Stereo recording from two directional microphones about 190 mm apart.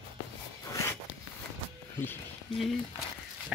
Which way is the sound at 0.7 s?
15° left (ahead or behind).